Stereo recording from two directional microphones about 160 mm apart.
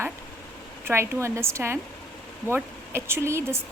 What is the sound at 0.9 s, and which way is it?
A woman's voice, 15° right (ahead or behind).